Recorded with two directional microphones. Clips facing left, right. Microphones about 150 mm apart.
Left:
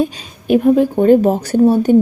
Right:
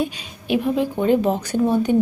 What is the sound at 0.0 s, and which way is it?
A woman's voice, 45° left (ahead or behind).